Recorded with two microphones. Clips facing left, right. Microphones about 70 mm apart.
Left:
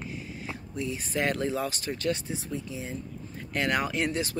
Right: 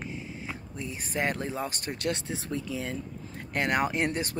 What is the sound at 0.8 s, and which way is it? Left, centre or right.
Speech, right.